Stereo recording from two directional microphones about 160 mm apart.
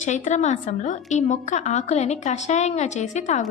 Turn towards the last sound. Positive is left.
turn(degrees=50)  # may be behind; listen again after turning